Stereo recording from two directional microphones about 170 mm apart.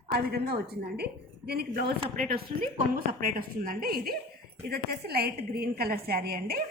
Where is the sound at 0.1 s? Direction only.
70° right (ahead or behind).